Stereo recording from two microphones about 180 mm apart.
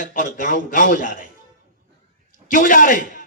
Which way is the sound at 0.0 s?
45° left (ahead or behind).